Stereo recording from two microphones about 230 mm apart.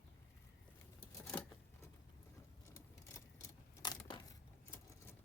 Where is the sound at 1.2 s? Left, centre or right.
Centre.